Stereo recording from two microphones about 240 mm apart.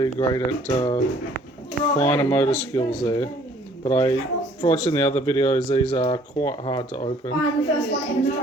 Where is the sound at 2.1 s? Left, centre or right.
Centre.